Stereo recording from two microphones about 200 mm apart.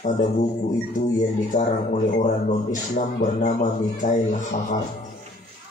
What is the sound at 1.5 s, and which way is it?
A man's voice, 40° left (ahead or behind).